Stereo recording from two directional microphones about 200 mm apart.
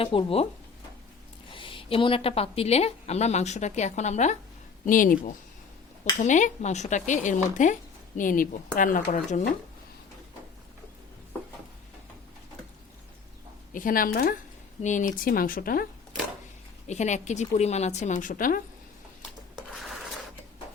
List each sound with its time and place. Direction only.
0.0 s speech: 25° left (ahead or behind)
1.5 s speech: 25° left (ahead or behind)
13.7 s speech: 45° left (ahead or behind)
16.8 s speech: 35° left (ahead or behind)